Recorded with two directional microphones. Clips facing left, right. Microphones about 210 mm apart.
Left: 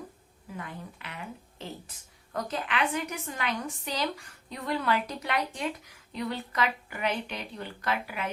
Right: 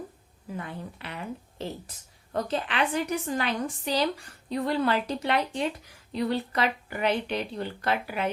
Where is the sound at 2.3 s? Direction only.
30° right (ahead or behind).